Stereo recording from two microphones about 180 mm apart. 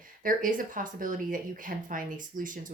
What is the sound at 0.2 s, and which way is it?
A woman's voice, 50° right (ahead or behind).